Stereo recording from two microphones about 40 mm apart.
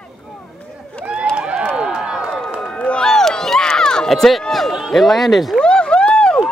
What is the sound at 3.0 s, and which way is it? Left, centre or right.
Crowd, centre.